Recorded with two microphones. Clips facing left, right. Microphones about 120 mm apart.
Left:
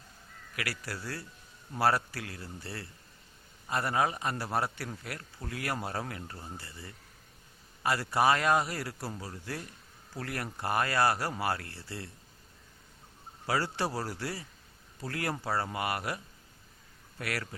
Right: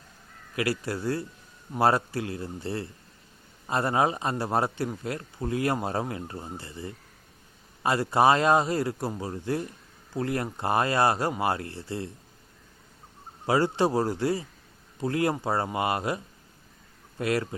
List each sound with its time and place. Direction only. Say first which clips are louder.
0.5 s a man's voice: right 10 dB; 25° right (ahead or behind)
13.5 s a man's voice: right 8 dB; 20° right (ahead or behind)